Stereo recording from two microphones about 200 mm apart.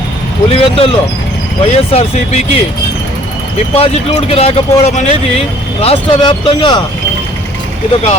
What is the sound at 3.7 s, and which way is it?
Speech, 30° left (ahead or behind).